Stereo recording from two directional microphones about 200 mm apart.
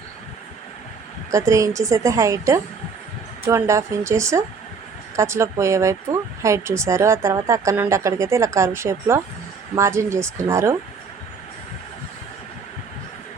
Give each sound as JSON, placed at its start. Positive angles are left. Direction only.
{"t": 1.3, "sound": "speech", "side_deg": -15}